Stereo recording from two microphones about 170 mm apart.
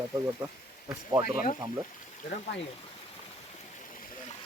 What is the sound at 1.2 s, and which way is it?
Speech, 55° left (ahead or behind).